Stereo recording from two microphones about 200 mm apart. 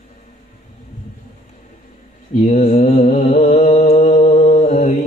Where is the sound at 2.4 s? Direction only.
40° left (ahead or behind).